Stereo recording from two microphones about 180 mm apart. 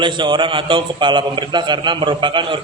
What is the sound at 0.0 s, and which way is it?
A man's voice, 25° right (ahead or behind).